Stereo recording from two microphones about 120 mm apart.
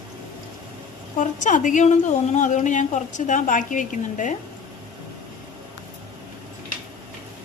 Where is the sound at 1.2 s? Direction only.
90° left.